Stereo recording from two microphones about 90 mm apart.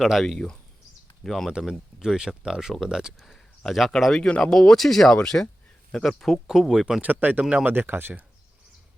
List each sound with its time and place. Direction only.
0.0 s speech: centre (ahead or behind)
1.5 s speech: 10° right (ahead or behind)
6.5 s speech: 5° right (ahead or behind)
7.0 s speech: 20° right (ahead or behind)